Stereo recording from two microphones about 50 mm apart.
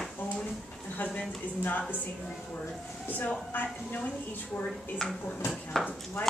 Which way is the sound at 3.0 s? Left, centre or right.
Left.